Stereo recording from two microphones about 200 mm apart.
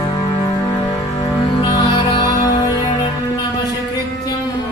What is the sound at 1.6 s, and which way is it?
Music, 20° left (ahead or behind).